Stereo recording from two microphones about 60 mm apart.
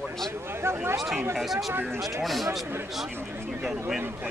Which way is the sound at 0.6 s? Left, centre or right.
Right.